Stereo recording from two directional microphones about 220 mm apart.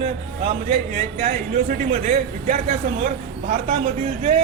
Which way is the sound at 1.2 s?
30° right (ahead or behind).